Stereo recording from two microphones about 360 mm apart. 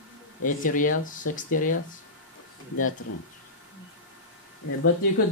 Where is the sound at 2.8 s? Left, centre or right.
Left.